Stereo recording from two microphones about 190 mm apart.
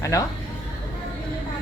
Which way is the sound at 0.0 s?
15° left (ahead or behind).